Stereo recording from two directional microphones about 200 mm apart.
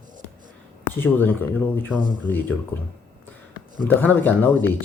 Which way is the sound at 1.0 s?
10° left (ahead or behind).